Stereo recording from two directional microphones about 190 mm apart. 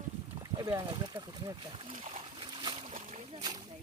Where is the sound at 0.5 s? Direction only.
20° right (ahead or behind).